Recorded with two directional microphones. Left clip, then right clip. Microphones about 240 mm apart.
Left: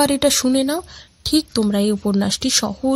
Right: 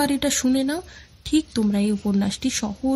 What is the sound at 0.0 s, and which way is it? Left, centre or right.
A woman's voice, left.